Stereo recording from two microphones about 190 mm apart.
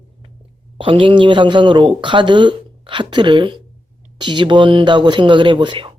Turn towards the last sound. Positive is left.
turn(degrees=-25)  # may be behind; listen again after turning